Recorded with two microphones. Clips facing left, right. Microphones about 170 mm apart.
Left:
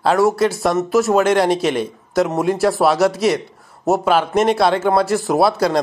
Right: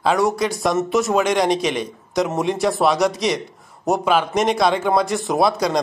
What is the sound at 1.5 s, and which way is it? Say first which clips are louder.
Speech: left 2 dB; 55° left (ahead or behind).